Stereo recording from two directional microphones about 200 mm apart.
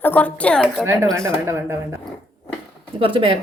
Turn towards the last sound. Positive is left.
turn(degrees=-25)  # may be behind; listen again after turning